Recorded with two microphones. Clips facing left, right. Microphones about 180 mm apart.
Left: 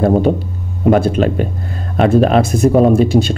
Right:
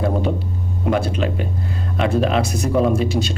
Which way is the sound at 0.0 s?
50° left (ahead or behind).